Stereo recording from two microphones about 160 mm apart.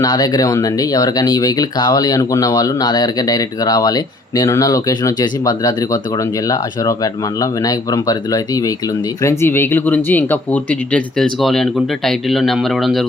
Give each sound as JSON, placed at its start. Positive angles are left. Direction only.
{"t": 0.0, "sound": "speech", "side_deg": 25}